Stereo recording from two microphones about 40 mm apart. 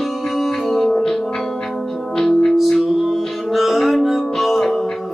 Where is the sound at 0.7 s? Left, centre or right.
Centre.